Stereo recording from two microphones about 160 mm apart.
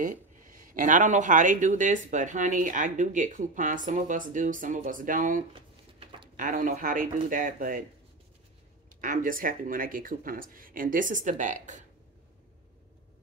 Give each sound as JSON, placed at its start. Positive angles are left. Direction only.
{"t": 0.0, "sound": "speech", "side_deg": -55}
{"t": 5.5, "sound": "a sound", "side_deg": -35}
{"t": 6.3, "sound": "speech", "side_deg": -55}
{"t": 8.8, "sound": "speech", "side_deg": -55}